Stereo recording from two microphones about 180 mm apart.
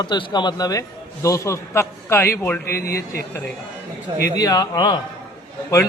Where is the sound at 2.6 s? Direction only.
55° left (ahead or behind).